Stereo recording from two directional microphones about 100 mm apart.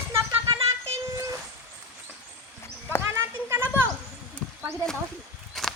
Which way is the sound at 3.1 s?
25° right (ahead or behind).